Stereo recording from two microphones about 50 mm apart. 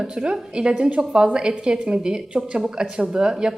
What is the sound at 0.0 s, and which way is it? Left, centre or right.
Speech, centre.